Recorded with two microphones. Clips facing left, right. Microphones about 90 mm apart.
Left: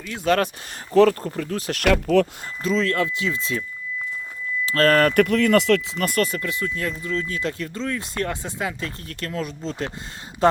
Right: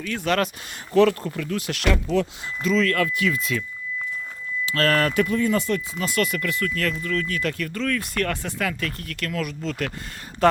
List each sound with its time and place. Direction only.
0.3 s speech: 30° left (ahead or behind)
1.9 s speech: 55° left (ahead or behind)
2.6 s speech: 30° left (ahead or behind)
4.6 s speech: 40° left (ahead or behind)
5.1 s speech: 70° left (ahead or behind); by 6.1 s 85° left
6.1 s speech: 35° left (ahead or behind)
6.4 s speech: 20° left (ahead or behind)